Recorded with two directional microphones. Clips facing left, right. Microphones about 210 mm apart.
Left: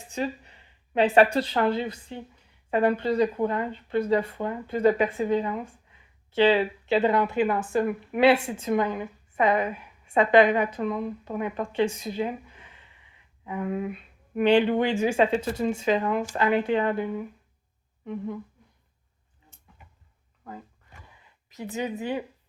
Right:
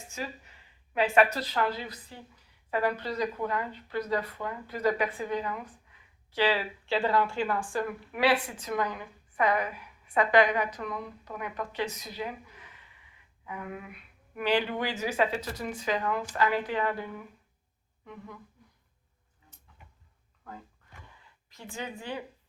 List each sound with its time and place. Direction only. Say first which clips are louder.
0.1 s a sound: left 9 dB; 30° left (ahead or behind)
0.9 s speech: left 5 dB; 30° left (ahead or behind)
21.5 s speech: left 8 dB; 20° left (ahead or behind)